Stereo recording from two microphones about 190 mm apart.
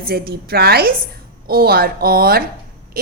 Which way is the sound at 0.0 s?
55° right (ahead or behind).